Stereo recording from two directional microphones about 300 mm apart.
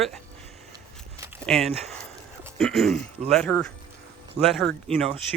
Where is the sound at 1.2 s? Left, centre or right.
Centre.